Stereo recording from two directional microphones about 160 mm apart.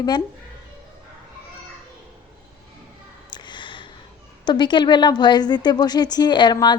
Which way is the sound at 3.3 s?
30° left (ahead or behind).